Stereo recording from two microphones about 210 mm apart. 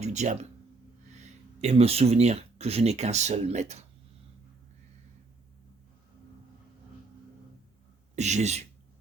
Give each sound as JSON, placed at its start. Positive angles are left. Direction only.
{"t": 0.0, "sound": "speech", "side_deg": -35}
{"t": 8.1, "sound": "a man's voice", "side_deg": -35}